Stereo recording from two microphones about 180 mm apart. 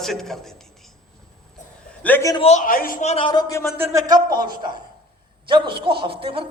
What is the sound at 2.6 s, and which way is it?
Speech, 50° left (ahead or behind).